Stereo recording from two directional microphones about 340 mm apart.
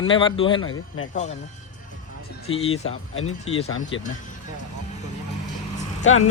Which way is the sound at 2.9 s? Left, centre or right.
Left.